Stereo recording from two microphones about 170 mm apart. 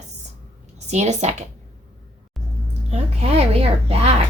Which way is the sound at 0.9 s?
40° right (ahead or behind).